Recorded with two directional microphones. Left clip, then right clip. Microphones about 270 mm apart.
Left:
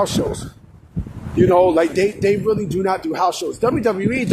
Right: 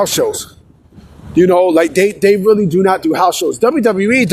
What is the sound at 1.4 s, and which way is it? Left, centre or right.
A man's voice, right.